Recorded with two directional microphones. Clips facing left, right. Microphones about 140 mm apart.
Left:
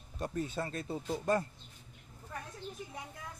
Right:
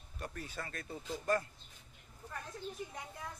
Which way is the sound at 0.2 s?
25° left (ahead or behind).